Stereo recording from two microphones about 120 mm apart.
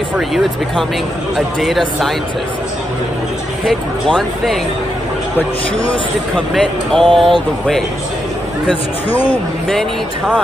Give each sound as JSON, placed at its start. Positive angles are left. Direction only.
{"t": 0.3, "sound": "speech", "side_deg": 0}
{"t": 3.6, "sound": "speech", "side_deg": 0}
{"t": 6.3, "sound": "speech", "side_deg": 5}